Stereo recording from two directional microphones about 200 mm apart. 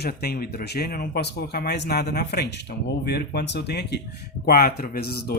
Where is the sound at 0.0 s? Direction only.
50° left (ahead or behind).